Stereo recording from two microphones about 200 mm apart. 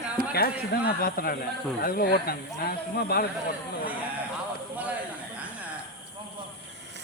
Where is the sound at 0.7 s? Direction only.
50° left (ahead or behind).